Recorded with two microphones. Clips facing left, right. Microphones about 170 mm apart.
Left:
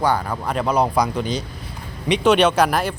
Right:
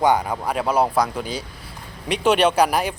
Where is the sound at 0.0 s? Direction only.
20° right (ahead or behind).